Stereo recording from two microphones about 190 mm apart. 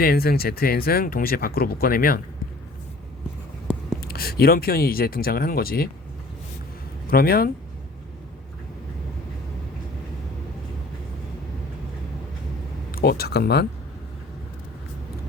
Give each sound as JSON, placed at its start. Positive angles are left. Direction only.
{"t": 0.0, "sound": "speech", "side_deg": 50}
{"t": 4.0, "sound": "speech", "side_deg": 50}
{"t": 7.1, "sound": "speech", "side_deg": 50}
{"t": 12.9, "sound": "speech", "side_deg": 50}